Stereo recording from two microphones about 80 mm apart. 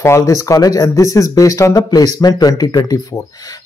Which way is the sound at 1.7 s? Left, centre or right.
Left.